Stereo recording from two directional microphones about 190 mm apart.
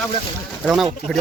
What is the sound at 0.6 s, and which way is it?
Speech, centre (ahead or behind).